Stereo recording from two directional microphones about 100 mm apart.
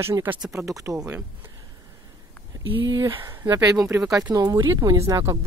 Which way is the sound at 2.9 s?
40° right (ahead or behind).